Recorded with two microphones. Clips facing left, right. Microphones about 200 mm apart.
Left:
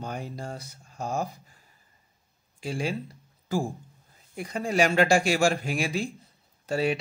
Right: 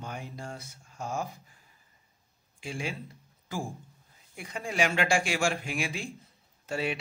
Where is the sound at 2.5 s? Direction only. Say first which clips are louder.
Left 6 dB; 35° left (ahead or behind).